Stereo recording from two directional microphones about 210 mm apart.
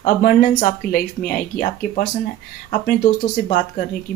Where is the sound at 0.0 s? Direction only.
40° left (ahead or behind).